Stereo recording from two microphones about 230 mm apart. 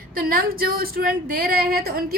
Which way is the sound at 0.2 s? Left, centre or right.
Right.